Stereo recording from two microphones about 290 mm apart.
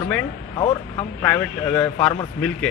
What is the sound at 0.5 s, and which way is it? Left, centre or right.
Speech, centre.